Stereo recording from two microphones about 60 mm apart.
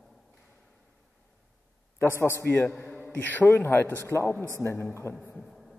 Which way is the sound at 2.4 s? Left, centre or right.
Left.